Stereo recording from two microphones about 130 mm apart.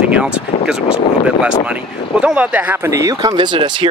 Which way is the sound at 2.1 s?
10° right (ahead or behind).